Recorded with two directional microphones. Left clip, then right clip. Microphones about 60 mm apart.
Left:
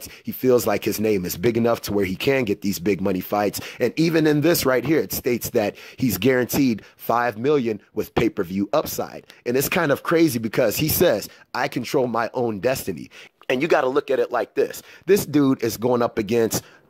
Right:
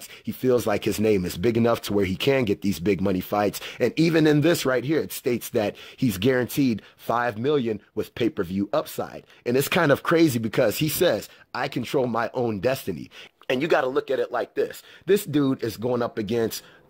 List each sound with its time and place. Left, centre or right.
0.4 s speech: left
4.6 s speech: left
5.0 s speech: left
9.0 s speech: centre
10.1 s speech: centre
10.4 s speech: left
13.5 s speech: left
13.9 s speech: left